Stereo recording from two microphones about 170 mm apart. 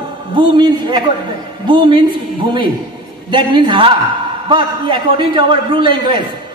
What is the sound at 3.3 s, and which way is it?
A man's voice, 25° right (ahead or behind).